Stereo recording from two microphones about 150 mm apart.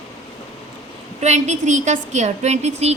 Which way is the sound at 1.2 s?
50° right (ahead or behind).